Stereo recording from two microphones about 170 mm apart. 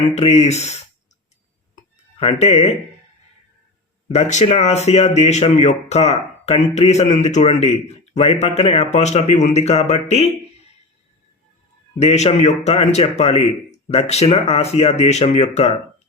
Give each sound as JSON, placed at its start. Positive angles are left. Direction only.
{"t": 0.1, "sound": "speech", "side_deg": 40}
{"t": 2.1, "sound": "speech", "side_deg": 40}
{"t": 4.1, "sound": "speech", "side_deg": 40}
{"t": 11.9, "sound": "speech", "side_deg": 40}